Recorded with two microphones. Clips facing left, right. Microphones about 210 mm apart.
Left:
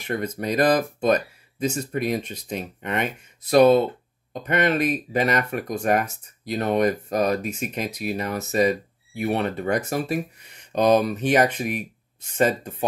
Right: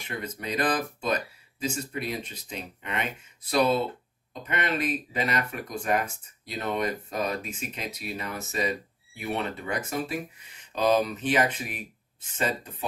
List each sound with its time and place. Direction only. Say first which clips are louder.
0.0 s speech: left 8 dB; 45° left (ahead or behind)
8.5 s speech: left 9 dB; 60° left (ahead or behind); by 10.2 s 45° left (ahead or behind)
10.7 s speech: left 5 dB; 55° left (ahead or behind)
11.2 s speech: left 6 dB; 45° left (ahead or behind)